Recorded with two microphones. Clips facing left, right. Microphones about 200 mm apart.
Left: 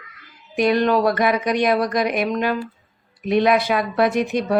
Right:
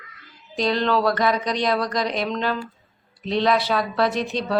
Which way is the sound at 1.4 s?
55° left (ahead or behind).